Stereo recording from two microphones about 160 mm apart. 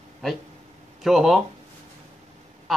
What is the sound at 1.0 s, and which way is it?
Speech, centre (ahead or behind).